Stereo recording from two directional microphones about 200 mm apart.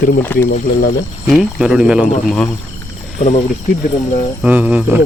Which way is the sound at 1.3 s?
5° right (ahead or behind).